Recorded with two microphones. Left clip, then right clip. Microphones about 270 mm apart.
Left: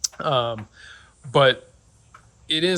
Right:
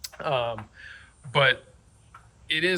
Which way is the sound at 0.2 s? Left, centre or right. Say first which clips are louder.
Left 3 dB; left.